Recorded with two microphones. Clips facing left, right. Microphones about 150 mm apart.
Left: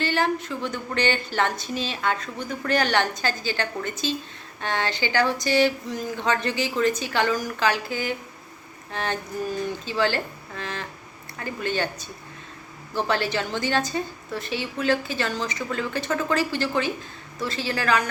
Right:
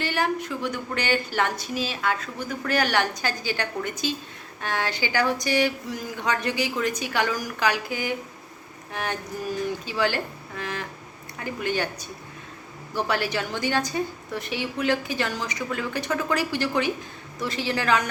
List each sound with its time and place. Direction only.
0.0 s a woman's voice: 15° right (ahead or behind)